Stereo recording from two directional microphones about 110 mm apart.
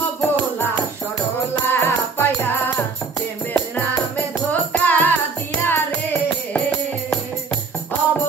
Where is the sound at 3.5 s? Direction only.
15° left (ahead or behind).